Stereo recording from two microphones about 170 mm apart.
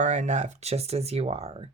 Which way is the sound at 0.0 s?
45° right (ahead or behind).